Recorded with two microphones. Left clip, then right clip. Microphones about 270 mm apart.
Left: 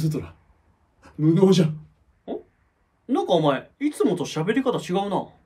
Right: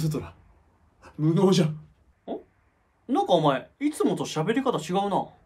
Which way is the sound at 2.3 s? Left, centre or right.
Centre.